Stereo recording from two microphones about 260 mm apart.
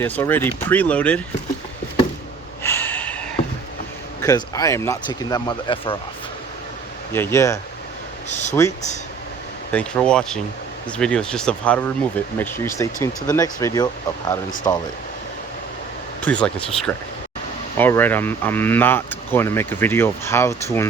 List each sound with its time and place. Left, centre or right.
0.0 s speech: centre
2.6 s snort: centre
4.2 s speech: centre
7.1 s speech: centre
9.7 s speech: centre
16.2 s speech: centre